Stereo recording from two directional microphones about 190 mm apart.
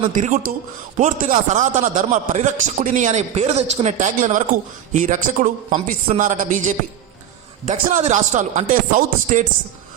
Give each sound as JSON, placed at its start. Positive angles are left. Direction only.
{"t": 0.1, "sound": "a man's voice", "side_deg": -40}